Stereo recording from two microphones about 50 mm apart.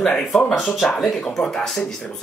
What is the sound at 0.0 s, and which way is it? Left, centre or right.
Speech, centre.